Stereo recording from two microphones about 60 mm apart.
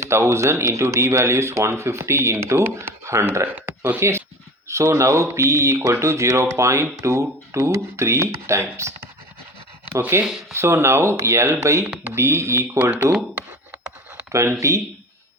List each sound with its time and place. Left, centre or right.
0.0 s speech: right
3.4 s speech: right
4.7 s speech: right
10.1 s speech: right
13.3 s a sound: right
14.6 s speech: right